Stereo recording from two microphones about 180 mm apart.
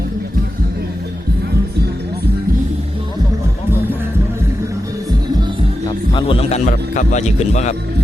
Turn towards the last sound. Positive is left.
turn(degrees=40)  # may be behind; listen again after turning